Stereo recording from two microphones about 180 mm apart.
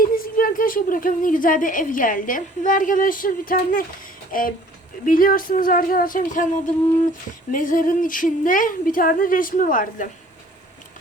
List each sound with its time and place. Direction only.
0.0 s a woman's voice: 50° left (ahead or behind)
7.5 s a woman's voice: 50° left (ahead or behind)